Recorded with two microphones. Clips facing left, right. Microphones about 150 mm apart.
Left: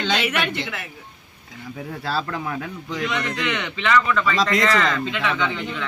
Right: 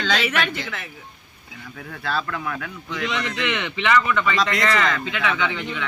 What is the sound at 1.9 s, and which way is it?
Speech, 30° left (ahead or behind).